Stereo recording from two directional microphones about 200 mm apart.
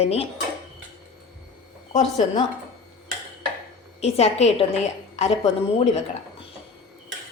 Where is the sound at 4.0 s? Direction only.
30° left (ahead or behind).